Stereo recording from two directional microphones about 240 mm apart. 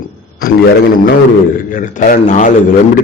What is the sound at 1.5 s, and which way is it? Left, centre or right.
Speech, left.